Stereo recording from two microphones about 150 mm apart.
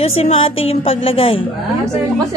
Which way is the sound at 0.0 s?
45° left (ahead or behind).